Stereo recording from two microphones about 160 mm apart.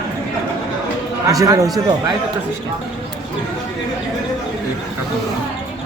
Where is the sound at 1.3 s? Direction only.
20° right (ahead or behind).